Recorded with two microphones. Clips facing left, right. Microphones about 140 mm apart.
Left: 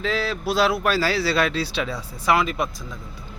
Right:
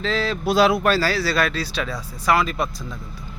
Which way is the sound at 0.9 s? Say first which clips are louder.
Even; 20° left (ahead or behind).